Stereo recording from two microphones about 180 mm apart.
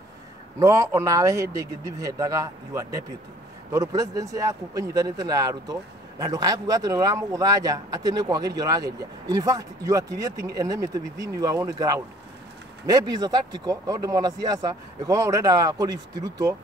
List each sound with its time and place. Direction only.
0.6 s speech: 20° right (ahead or behind)